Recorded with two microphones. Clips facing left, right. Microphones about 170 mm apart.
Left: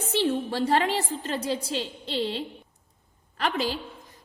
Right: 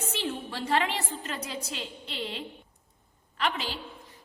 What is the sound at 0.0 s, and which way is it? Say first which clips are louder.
A woman's voice: left 8 dB; 35° left (ahead or behind).